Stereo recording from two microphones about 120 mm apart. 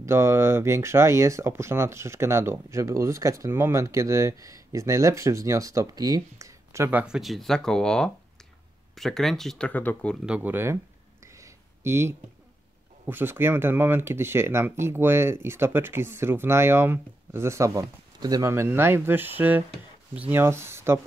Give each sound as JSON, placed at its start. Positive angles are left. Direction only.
{"t": 0.0, "sound": "speech", "side_deg": -20}
{"t": 7.2, "sound": "speech", "side_deg": 0}
{"t": 10.2, "sound": "speech", "side_deg": -10}
{"t": 11.2, "sound": "a sound", "side_deg": -25}
{"t": 13.0, "sound": "speech", "side_deg": -15}
{"t": 18.5, "sound": "speech", "side_deg": -20}